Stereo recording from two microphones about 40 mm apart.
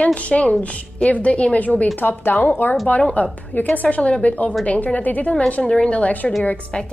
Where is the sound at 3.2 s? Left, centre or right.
Left.